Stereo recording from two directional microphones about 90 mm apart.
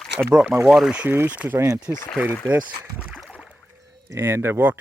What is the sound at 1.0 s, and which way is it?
Speech, 20° right (ahead or behind).